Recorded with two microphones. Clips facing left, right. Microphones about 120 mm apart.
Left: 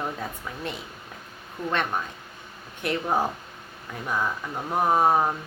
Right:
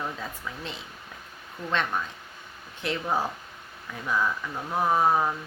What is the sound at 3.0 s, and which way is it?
Speech, 15° left (ahead or behind).